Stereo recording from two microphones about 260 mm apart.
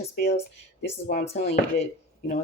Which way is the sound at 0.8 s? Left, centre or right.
Left.